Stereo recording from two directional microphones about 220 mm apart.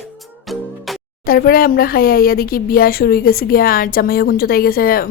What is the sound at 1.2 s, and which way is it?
Speech, 40° left (ahead or behind).